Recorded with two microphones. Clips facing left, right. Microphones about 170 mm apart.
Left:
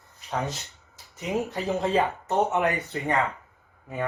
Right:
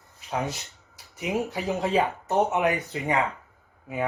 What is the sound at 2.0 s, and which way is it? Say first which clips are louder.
Speech: right 1 dB; 20° right (ahead or behind).